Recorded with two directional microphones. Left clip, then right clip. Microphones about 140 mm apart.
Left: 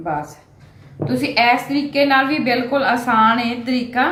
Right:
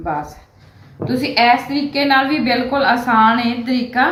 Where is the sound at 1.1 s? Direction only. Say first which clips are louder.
Right 2 dB; 20° left (ahead or behind).